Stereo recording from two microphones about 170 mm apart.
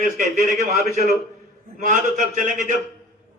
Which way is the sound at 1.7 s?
45° right (ahead or behind).